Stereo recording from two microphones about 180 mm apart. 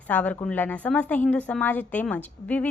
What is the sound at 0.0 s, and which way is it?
A woman's voice, 10° left (ahead or behind).